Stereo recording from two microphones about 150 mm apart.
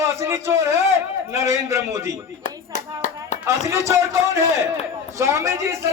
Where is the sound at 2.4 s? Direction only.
55° left (ahead or behind).